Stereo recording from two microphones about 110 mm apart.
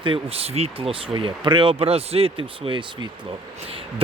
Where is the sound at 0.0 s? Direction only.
55° right (ahead or behind).